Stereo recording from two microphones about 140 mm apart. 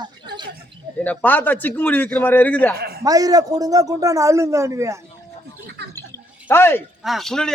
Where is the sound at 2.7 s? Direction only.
90° right.